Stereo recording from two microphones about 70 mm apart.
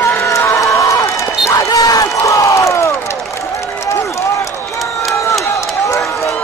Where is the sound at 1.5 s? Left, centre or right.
Left.